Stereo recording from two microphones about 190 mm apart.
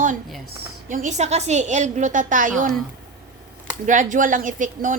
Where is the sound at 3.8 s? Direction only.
45° right (ahead or behind).